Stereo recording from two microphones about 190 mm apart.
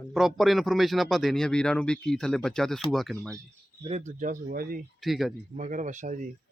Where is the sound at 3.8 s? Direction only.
35° right (ahead or behind); by 4.8 s 50° right (ahead or behind).